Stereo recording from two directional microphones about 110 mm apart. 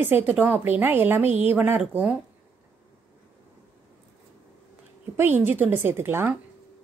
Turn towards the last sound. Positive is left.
turn(degrees=-20)  # may be behind; listen again after turning